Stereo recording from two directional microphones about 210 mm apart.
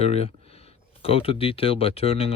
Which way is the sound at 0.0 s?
30° left (ahead or behind).